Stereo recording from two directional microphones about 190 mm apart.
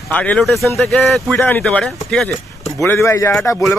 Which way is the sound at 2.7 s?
15° left (ahead or behind).